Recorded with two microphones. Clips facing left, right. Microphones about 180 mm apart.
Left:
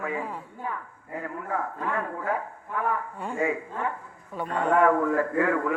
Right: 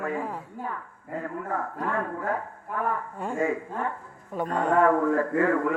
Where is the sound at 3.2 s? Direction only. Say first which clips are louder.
Right 1 dB; 45° right (ahead or behind).